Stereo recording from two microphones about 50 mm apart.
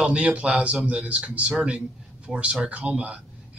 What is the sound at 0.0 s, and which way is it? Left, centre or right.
Speech, right.